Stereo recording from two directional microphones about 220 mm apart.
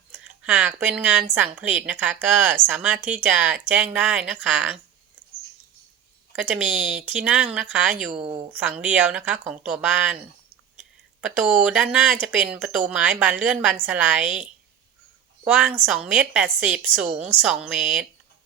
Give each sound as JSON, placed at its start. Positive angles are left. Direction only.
{"t": 0.1, "sound": "speech", "side_deg": -5}
{"t": 6.3, "sound": "speech", "side_deg": -5}
{"t": 8.1, "sound": "a woman's voice", "side_deg": -25}
{"t": 8.5, "sound": "speech", "side_deg": -5}
{"t": 10.8, "sound": "a sound", "side_deg": -5}
{"t": 11.6, "sound": "speech", "side_deg": -5}
{"t": 15.4, "sound": "speech", "side_deg": -5}